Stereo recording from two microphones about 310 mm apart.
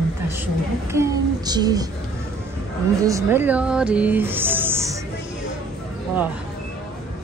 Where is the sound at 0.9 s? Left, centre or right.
Centre.